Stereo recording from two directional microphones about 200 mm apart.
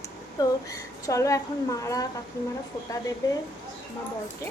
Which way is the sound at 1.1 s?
15° left (ahead or behind).